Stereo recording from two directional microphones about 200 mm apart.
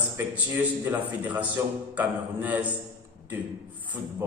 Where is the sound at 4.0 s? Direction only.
10° right (ahead or behind).